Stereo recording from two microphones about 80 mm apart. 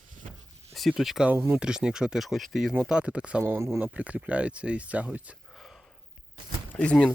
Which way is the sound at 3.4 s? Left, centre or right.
Right.